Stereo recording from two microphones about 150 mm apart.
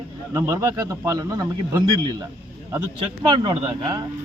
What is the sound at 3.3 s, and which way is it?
Speech, 35° right (ahead or behind).